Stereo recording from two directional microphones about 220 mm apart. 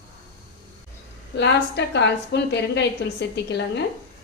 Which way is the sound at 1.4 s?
50° left (ahead or behind).